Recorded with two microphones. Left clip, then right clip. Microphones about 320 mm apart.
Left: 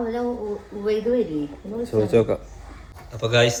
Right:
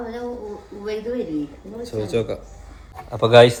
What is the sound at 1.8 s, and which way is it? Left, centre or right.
Speech, centre.